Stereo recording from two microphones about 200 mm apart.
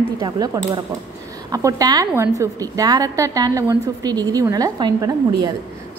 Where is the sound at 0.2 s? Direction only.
20° right (ahead or behind).